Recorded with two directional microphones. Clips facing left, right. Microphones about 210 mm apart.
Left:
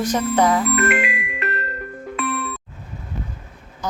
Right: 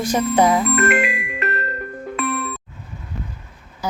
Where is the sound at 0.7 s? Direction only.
45° right (ahead or behind).